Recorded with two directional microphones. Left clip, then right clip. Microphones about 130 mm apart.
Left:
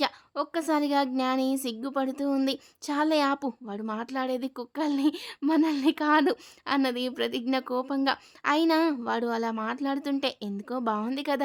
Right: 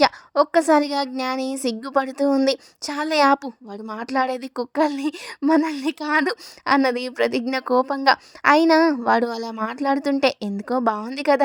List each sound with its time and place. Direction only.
0.0 s a woman's voice: 50° right (ahead or behind)
8.8 s a woman's voice: 20° right (ahead or behind)
9.0 s a woman's voice: 50° right (ahead or behind)